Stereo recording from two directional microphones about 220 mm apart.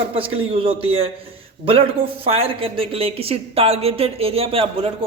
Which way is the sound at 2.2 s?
25° right (ahead or behind).